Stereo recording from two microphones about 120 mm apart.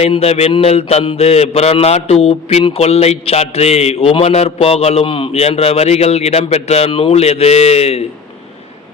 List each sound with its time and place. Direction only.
0.0 s a man's voice: 60° left (ahead or behind)